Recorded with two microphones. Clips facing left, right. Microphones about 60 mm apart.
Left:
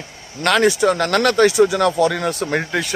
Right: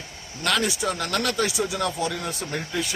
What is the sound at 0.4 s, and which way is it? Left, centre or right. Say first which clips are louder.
Speech: left 9 dB; left.